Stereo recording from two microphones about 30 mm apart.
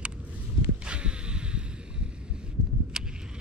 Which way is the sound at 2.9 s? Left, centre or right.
Right.